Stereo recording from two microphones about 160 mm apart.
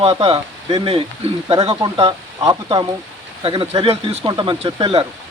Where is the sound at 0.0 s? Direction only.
35° right (ahead or behind).